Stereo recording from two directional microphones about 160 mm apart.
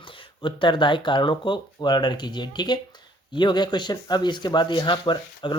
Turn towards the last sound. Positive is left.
turn(degrees=30)  # may be behind; listen again after turning